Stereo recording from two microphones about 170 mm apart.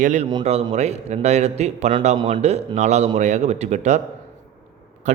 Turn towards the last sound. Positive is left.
turn(degrees=-45)  # may be behind; listen again after turning